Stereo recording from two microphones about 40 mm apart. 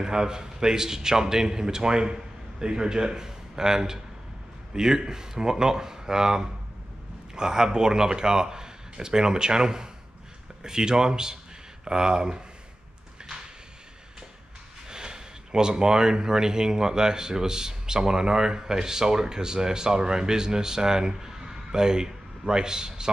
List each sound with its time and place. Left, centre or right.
0.0 s speech: centre
14.9 s speech: centre